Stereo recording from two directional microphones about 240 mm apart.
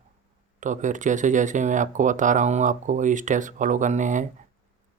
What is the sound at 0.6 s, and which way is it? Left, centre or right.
Speech, right.